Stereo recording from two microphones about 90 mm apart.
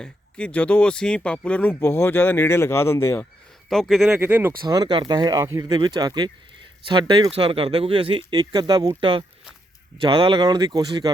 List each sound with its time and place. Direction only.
0.0 s speech: 15° left (ahead or behind); by 3.2 s 30° left (ahead or behind)
3.7 s speech: centre (ahead or behind)
4.2 s speech: 25° right (ahead or behind)
4.6 s speech: 50° right (ahead or behind)
5.6 s speech: 55° right (ahead or behind)
7.3 s speech: 90° right
8.4 s speech: 50° right (ahead or behind)
9.0 s speech: 70° right (ahead or behind); by 11.1 s 50° right (ahead or behind)